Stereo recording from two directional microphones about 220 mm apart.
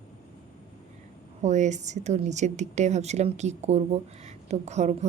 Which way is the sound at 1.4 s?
35° right (ahead or behind).